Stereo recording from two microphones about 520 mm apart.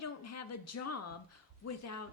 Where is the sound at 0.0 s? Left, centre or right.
Left.